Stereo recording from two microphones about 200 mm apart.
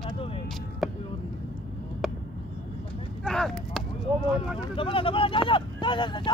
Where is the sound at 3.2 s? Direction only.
5° left (ahead or behind).